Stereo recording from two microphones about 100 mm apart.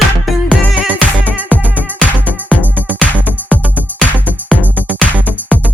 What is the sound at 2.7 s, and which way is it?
Music, 15° right (ahead or behind).